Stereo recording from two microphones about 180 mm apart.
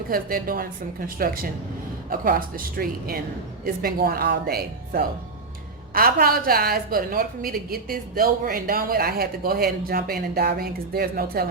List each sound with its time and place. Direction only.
0.1 s a woman's voice: 55° right (ahead or behind)